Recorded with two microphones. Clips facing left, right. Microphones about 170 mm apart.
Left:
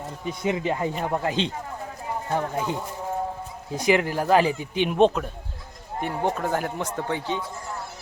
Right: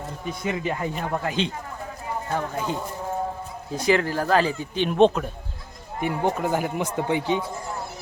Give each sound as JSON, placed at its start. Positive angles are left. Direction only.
{"t": 0.3, "sound": "speech", "side_deg": 20}